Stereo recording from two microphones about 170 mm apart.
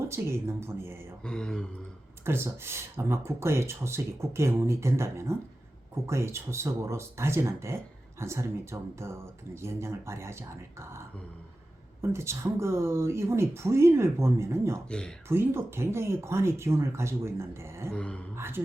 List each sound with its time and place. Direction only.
0.1 s speech: 15° right (ahead or behind)
1.2 s mantra: 5° left (ahead or behind)
2.2 s speech: 15° right (ahead or behind)
12.0 s speech: 15° right (ahead or behind)
14.8 s mantra: 5° left (ahead or behind)
15.3 s speech: 15° right (ahead or behind)
17.9 s speech: 5° left (ahead or behind)
18.3 s speech: 15° right (ahead or behind)